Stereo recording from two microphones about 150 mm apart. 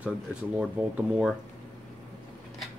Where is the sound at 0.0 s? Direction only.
10° right (ahead or behind).